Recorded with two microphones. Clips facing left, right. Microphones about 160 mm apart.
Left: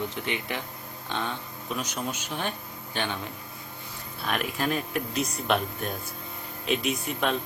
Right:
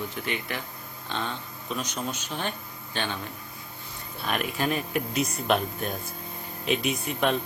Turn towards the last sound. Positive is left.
turn(degrees=0)  # may be behind; listen again after turning